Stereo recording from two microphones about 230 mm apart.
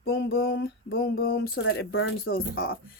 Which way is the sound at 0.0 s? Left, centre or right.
Left.